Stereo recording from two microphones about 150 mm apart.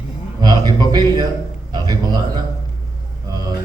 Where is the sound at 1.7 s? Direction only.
25° right (ahead or behind).